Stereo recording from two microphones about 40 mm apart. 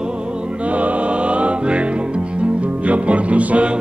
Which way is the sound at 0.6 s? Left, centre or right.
Right.